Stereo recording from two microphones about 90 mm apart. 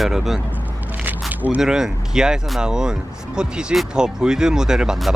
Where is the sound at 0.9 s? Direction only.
20° right (ahead or behind).